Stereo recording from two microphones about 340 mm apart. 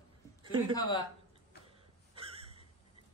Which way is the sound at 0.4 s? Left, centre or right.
Centre.